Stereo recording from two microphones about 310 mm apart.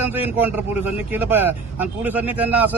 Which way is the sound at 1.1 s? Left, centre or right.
Centre.